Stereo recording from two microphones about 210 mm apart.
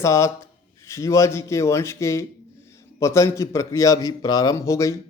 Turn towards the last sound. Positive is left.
turn(degrees=15)  # may be behind; listen again after turning